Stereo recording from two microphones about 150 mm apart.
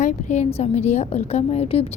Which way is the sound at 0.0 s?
50° left (ahead or behind).